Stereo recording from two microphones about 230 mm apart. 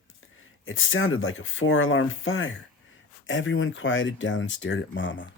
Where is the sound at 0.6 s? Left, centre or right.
Left.